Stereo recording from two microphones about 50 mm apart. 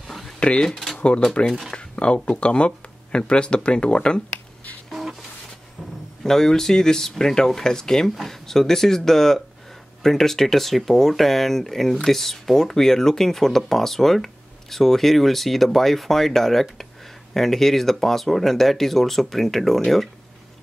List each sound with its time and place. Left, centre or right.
0.0 s a sound: centre
0.4 s speech: centre
0.7 s typewriter: centre
1.0 s speech: left
6.2 s speech: centre